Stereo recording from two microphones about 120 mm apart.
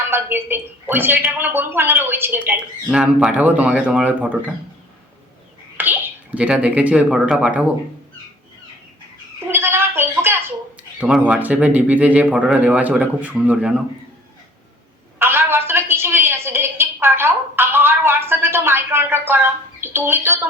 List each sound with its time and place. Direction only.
0.1 s speech: 20° right (ahead or behind)
5.7 s speech: 15° right (ahead or behind)
9.5 s a sound: 20° right (ahead or behind)
11.0 s speech: 5° right (ahead or behind)
15.2 s a sound: 20° right (ahead or behind)
19.8 s speech: 20° right (ahead or behind)